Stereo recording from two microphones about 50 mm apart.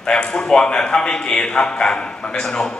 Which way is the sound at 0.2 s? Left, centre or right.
Left.